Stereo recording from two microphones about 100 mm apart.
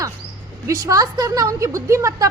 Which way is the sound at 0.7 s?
35° right (ahead or behind).